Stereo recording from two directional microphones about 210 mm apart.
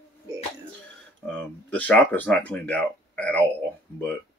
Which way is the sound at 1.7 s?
10° left (ahead or behind).